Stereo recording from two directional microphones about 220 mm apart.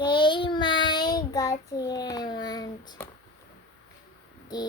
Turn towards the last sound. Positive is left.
turn(degrees=20)  # may be behind; listen again after turning